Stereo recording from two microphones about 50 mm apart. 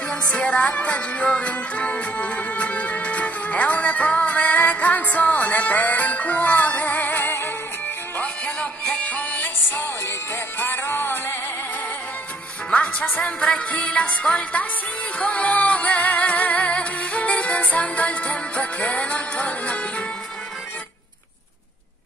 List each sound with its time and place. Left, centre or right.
0.1 s music: left
7.2 s synthetic singing: left
8.2 s music: left
10.6 s music: left
13.0 s music: left